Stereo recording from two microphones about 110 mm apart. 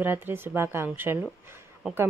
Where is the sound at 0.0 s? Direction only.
20° right (ahead or behind).